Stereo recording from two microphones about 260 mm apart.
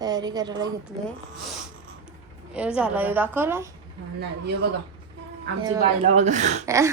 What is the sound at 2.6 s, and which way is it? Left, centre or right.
Speech, centre.